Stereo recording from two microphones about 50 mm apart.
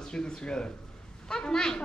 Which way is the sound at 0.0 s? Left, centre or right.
Centre.